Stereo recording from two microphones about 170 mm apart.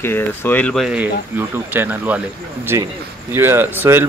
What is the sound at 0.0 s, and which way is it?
Speech, 10° left (ahead or behind).